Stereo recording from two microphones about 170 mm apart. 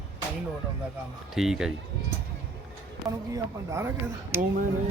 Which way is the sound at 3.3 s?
15° right (ahead or behind).